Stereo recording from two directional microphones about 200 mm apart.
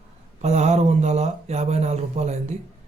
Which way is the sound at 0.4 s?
35° right (ahead or behind).